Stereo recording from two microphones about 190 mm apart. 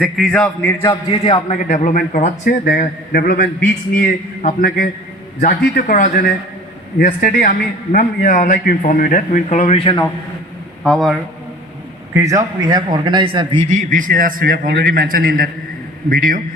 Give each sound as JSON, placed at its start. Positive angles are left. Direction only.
{"t": 0.0, "sound": "a man's voice", "side_deg": 5}
{"t": 0.8, "sound": "a man's voice", "side_deg": 25}
{"t": 10.8, "sound": "a man's voice", "side_deg": 0}
{"t": 12.1, "sound": "speech", "side_deg": -15}
{"t": 13.7, "sound": "a man's voice", "side_deg": -40}